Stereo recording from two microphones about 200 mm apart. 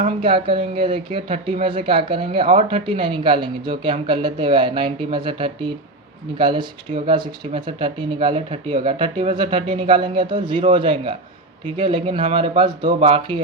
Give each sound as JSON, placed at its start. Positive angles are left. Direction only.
{"t": 0.2, "sound": "speech", "side_deg": -25}